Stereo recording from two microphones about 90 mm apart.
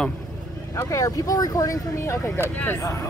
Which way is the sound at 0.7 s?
40° left (ahead or behind).